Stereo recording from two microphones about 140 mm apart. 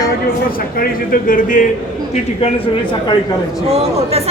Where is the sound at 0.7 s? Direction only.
85° left.